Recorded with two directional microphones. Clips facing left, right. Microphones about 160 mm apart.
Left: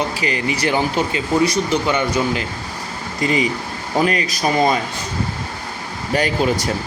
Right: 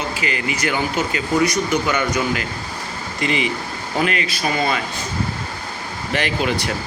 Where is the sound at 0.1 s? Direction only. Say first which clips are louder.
Left 3 dB; 35° left (ahead or behind).